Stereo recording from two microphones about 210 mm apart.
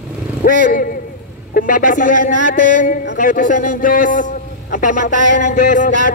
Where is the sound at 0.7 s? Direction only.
45° left (ahead or behind).